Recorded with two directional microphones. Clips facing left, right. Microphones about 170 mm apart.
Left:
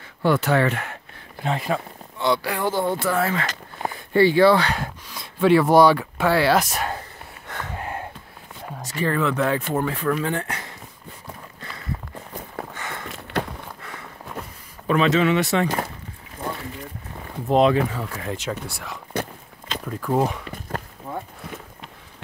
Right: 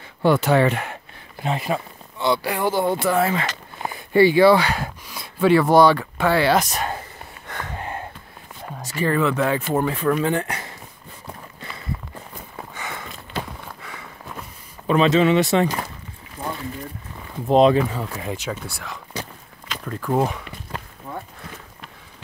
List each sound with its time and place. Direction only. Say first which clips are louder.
0.2 s speech: right 3 dB; 15° right (ahead or behind); by 7.0 s 5° left (ahead or behind)
7.4 s a sound: even; 5° left (ahead or behind)
8.6 s speech: right 2 dB; 5° right (ahead or behind)
9.8 s speech: right 3 dB; 20° right (ahead or behind)
12.7 s a sound: right 1 dB; 5° right (ahead or behind)
13.1 s walk: left 4 dB; 70° left (ahead or behind)
14.9 s speech: right 2 dB; 25° right (ahead or behind)
17.5 s speech: right 3 dB; 30° right (ahead or behind)
17.9 s speech: right 1 dB; 15° right (ahead or behind)
18.3 s speech: even; centre (ahead or behind)
20.4 s walk: left 3 dB; 45° left (ahead or behind)